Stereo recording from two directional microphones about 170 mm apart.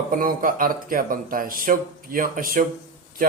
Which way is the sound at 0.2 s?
55° right (ahead or behind).